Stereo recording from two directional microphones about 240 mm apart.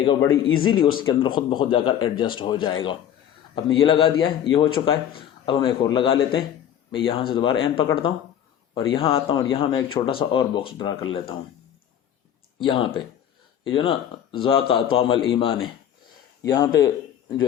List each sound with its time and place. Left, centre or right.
0.0 s speech: left
0.3 s speech: left
0.6 s speech: centre
12.6 s speech: left